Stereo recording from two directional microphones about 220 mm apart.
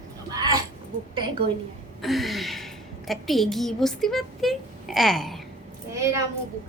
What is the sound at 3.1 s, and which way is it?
A woman's voice, centre (ahead or behind).